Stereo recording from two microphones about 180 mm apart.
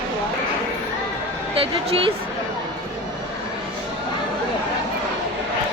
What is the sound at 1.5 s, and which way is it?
Speech, 30° right (ahead or behind).